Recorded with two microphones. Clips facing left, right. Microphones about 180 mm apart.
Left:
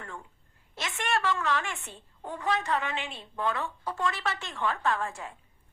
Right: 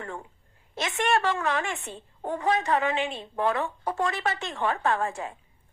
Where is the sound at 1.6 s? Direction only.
20° right (ahead or behind).